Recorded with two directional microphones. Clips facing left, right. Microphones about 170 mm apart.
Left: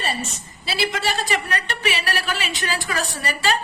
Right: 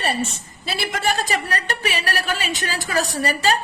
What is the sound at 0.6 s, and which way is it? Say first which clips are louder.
A woman's voice: even; 50° right (ahead or behind).